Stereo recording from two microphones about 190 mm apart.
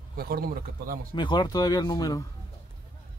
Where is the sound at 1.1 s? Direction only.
25° left (ahead or behind).